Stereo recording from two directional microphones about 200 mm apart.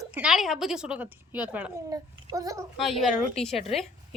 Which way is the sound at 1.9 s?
15° right (ahead or behind).